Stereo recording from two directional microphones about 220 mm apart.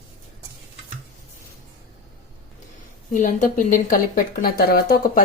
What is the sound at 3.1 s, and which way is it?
Speech, 35° left (ahead or behind).